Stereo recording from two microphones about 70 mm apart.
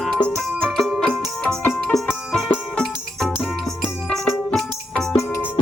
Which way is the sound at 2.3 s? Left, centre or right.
Centre.